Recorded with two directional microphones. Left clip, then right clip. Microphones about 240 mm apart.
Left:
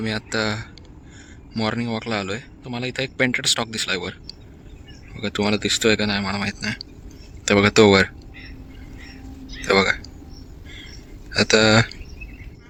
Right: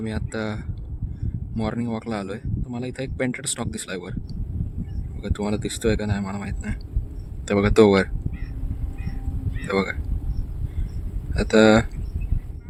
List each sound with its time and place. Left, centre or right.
0.0 s speech: centre
5.1 s speech: centre
9.6 s speech: centre
11.3 s speech: centre